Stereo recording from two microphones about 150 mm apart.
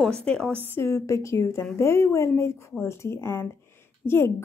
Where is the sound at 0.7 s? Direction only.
15° left (ahead or behind).